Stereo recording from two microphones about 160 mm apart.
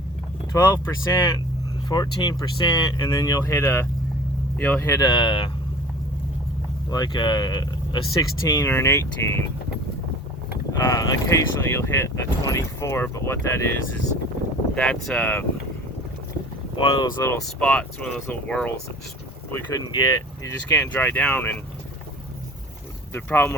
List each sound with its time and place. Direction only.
0.5 s speech: 20° left (ahead or behind)
6.9 s speech: 25° left (ahead or behind)
10.7 s speech: 20° left (ahead or behind)
14.8 s speech: 10° left (ahead or behind)
16.7 s speech: 25° left (ahead or behind)
17.2 s speech: 15° left (ahead or behind)
19.9 s speech: 25° left (ahead or behind)
20.7 s speech: 10° left (ahead or behind)
23.1 s speech: 15° left (ahead or behind)